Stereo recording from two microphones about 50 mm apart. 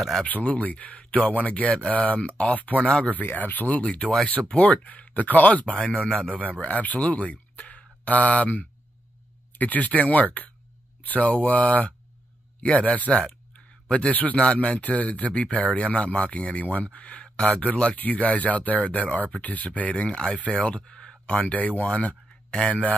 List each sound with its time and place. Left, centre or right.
0.2 s speech: left
5.8 s speech: centre